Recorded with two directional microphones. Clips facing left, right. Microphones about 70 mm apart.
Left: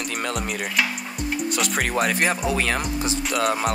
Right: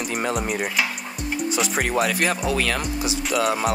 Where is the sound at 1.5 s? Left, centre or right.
Left.